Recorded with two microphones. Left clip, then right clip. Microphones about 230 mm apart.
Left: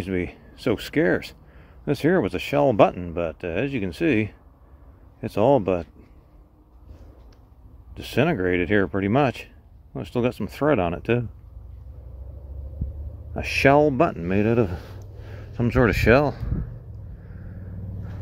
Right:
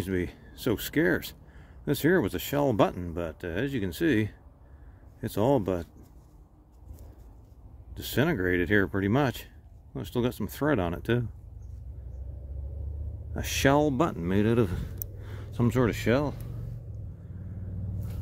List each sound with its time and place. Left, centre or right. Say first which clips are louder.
0.0 s speech: left 4 dB; centre
7.9 s speech: left 5 dB; centre
13.3 s speech: left 7 dB; centre
15.3 s a sound: left 4 dB; centre
15.8 s speech: left 10 dB; centre